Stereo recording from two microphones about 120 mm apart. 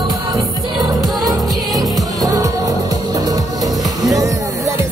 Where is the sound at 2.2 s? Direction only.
30° right (ahead or behind).